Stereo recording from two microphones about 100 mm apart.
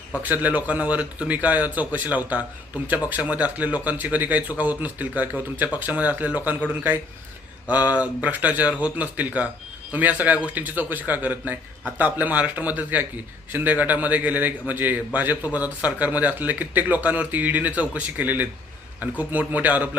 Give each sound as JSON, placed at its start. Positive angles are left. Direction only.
{"t": 0.2, "sound": "speech", "side_deg": -15}
{"t": 7.7, "sound": "speech", "side_deg": -15}